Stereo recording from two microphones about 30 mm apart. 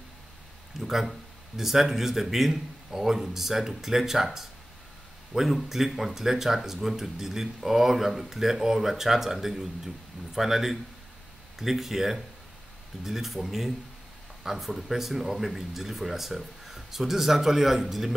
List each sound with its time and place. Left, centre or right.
0.7 s speech: centre